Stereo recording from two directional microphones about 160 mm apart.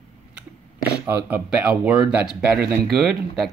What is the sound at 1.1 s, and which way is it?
Speech, 10° right (ahead or behind).